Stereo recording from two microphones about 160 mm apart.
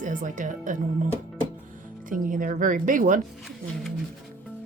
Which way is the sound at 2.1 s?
55° right (ahead or behind).